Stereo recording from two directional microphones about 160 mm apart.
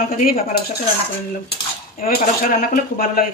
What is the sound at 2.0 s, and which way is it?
Speech, 60° left (ahead or behind).